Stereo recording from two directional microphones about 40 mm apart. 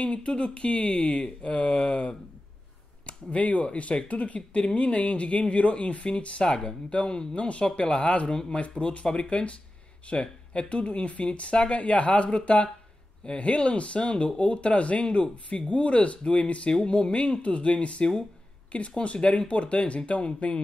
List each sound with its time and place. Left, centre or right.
0.0 s speech: left
15.2 s speech: centre
15.7 s speech: left